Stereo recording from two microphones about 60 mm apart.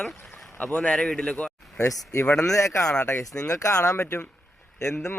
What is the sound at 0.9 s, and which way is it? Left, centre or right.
Speech, centre.